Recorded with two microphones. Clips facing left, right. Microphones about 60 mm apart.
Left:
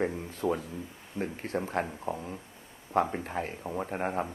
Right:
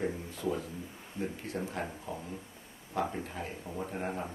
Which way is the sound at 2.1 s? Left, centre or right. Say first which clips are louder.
Left 5 dB; left.